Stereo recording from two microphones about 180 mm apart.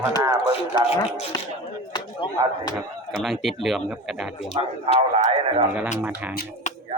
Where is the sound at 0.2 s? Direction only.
20° right (ahead or behind).